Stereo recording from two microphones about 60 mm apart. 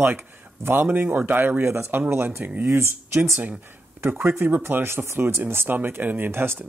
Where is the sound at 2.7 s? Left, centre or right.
Right.